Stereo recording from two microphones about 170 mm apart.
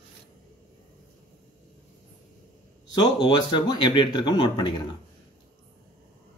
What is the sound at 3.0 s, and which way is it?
Speech, 25° left (ahead or behind).